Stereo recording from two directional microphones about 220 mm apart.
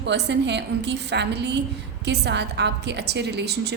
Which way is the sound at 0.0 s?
50° right (ahead or behind).